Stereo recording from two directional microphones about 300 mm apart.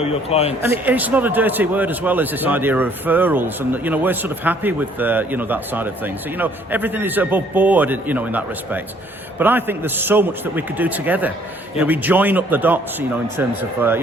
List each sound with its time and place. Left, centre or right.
0.0 s speech: centre
0.6 s a man's voice: centre